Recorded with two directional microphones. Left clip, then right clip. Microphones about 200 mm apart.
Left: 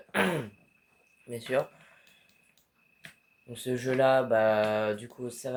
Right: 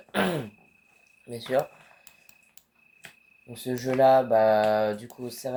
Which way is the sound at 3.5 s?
30° right (ahead or behind).